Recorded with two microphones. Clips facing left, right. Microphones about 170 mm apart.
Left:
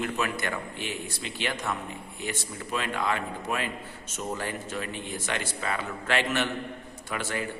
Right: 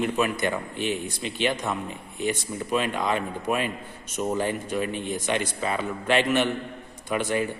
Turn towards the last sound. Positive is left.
turn(degrees=-20)  # may be behind; listen again after turning